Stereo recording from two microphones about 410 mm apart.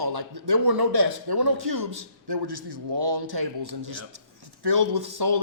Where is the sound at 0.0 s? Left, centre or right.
Right.